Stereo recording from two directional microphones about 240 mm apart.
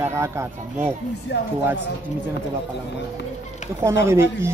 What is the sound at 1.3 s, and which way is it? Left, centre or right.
Speech, left.